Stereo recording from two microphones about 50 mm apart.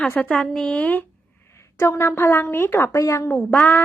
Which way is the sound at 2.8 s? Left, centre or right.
Left.